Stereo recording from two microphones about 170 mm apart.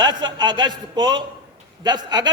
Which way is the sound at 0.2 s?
25° right (ahead or behind).